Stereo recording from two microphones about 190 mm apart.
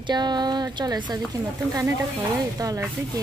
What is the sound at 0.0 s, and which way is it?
Speech, 20° right (ahead or behind).